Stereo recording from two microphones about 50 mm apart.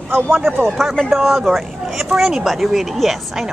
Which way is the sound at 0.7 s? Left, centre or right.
Centre.